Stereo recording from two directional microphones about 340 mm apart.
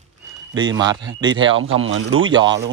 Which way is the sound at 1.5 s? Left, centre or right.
Right.